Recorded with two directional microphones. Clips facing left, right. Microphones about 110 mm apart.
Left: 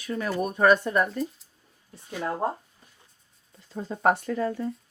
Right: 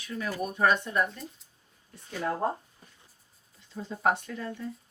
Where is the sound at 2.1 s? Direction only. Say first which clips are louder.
Left 1 dB; 15° left (ahead or behind).